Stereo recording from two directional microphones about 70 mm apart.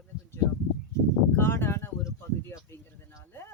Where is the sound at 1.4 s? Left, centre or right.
Left.